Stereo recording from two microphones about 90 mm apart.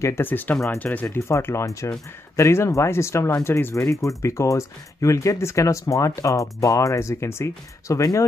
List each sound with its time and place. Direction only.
0.0 s speech: 25° left (ahead or behind)
1.1 s speech: 30° left (ahead or behind)